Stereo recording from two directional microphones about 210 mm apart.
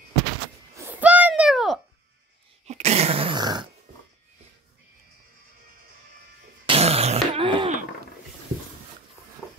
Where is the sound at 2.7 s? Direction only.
30° right (ahead or behind).